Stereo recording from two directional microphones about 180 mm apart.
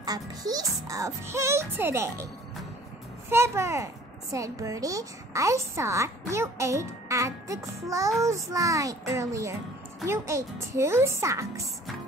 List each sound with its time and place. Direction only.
0.0 s a woman's voice: 20° right (ahead or behind)
3.3 s a woman's voice: 15° right (ahead or behind)